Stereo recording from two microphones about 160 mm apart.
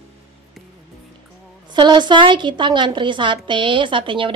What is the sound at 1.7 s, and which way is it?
Speech, 30° right (ahead or behind).